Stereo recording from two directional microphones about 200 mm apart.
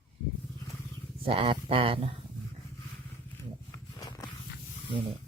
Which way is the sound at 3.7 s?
20° left (ahead or behind).